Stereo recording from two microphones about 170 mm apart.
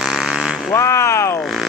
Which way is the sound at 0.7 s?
15° left (ahead or behind).